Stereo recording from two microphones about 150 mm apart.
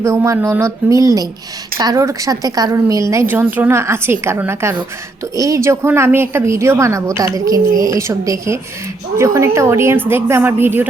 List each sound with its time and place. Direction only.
0.0 s a woman's voice: 20° right (ahead or behind)